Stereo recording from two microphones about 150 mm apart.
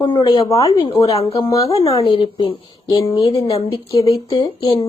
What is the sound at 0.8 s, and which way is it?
Speech, 35° left (ahead or behind).